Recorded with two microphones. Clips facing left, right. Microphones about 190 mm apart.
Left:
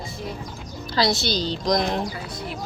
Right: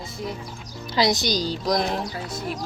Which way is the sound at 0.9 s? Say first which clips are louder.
Right 1 dB; 20° right (ahead or behind).